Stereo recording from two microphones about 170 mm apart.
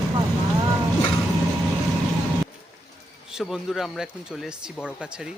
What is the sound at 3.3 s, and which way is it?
Speech, 5° right (ahead or behind).